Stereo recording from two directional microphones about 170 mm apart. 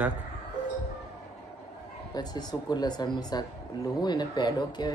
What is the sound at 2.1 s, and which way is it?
Speech, 25° left (ahead or behind).